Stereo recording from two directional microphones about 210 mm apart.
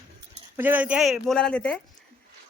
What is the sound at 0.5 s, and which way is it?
Speech, 10° right (ahead or behind).